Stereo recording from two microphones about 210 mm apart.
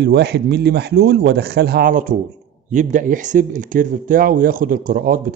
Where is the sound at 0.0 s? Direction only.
50° right (ahead or behind).